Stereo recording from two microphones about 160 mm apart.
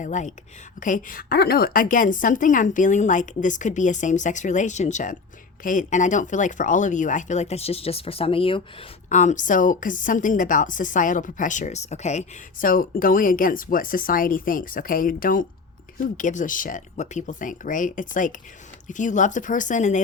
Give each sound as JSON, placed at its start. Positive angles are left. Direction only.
{"t": 0.0, "sound": "a woman's voice", "side_deg": 50}
{"t": 9.0, "sound": "a woman's voice", "side_deg": 50}